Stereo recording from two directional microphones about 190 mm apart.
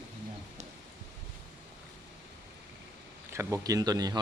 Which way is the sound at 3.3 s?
15° right (ahead or behind).